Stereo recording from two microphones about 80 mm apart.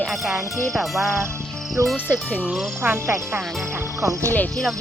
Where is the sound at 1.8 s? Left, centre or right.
Right.